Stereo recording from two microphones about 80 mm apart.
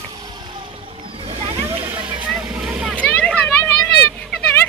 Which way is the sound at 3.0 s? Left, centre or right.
Centre.